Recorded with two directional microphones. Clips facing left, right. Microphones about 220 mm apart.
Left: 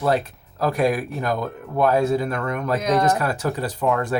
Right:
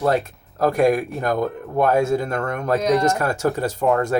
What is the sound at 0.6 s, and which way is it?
Speech, 45° right (ahead or behind).